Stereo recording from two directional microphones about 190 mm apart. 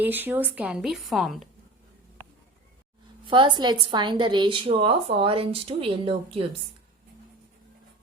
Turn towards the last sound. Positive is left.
turn(degrees=-30)  # may be behind; listen again after turning